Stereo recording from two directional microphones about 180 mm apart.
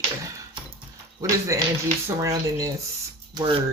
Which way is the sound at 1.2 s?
20° right (ahead or behind).